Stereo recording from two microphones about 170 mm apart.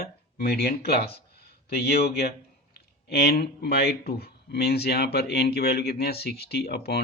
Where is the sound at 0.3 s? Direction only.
70° left (ahead or behind).